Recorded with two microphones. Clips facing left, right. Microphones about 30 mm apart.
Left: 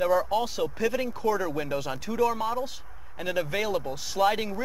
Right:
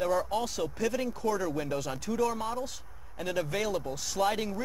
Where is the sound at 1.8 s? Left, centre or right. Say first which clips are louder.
Left 6 dB; centre.